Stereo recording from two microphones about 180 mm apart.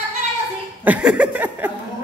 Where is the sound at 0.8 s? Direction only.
5° right (ahead or behind).